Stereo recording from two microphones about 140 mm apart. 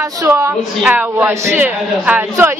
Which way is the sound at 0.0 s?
20° right (ahead or behind).